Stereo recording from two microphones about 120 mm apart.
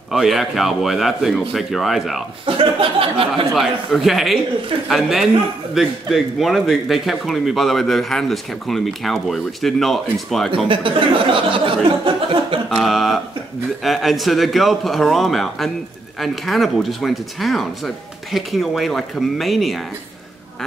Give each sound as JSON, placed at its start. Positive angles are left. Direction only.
{"t": 0.1, "sound": "speech", "side_deg": 0}
{"t": 2.4, "sound": "speech", "side_deg": -50}
{"t": 3.5, "sound": "speech", "side_deg": 0}
{"t": 10.7, "sound": "speech", "side_deg": -45}
{"t": 12.6, "sound": "speech", "side_deg": 0}